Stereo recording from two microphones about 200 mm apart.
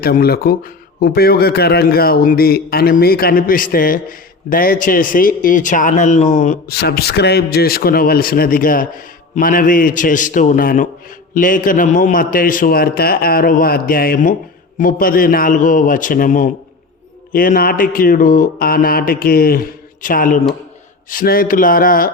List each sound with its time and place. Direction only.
0.0 s a man's voice: 50° left (ahead or behind)